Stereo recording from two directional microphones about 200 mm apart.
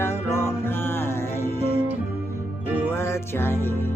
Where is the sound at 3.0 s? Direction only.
15° left (ahead or behind).